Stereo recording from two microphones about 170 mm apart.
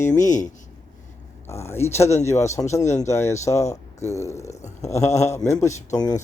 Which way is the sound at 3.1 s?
15° left (ahead or behind).